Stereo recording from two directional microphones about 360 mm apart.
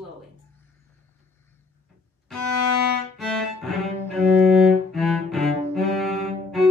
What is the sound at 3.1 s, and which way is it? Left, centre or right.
Music, centre.